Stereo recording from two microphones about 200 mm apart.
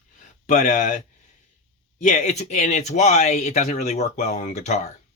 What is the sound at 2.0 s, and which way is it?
Speech, 35° left (ahead or behind).